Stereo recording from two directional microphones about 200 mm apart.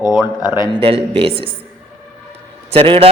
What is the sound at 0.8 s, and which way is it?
Speech, 25° right (ahead or behind).